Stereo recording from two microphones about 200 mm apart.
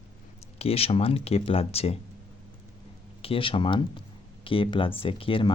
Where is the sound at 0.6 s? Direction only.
30° left (ahead or behind).